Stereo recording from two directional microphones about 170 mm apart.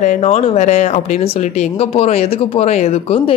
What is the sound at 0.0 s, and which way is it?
Speech, 45° left (ahead or behind).